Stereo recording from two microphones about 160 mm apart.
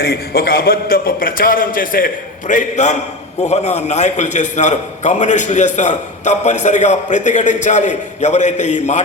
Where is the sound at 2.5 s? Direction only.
50° left (ahead or behind).